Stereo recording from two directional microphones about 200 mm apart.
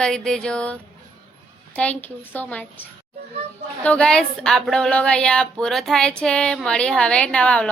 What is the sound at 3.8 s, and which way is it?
A woman's voice, 5° left (ahead or behind).